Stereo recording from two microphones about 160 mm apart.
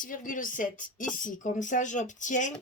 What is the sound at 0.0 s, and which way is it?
Speech, 55° left (ahead or behind).